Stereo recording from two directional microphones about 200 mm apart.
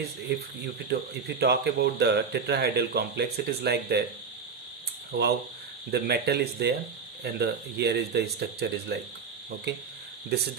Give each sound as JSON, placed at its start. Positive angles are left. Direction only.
{"t": 1.4, "sound": "speech", "side_deg": -55}
{"t": 5.1, "sound": "speech", "side_deg": -55}